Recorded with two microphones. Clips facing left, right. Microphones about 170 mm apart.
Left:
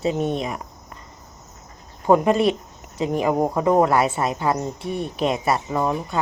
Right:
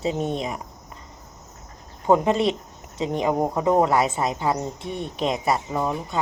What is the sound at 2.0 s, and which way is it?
Speech, 25° right (ahead or behind).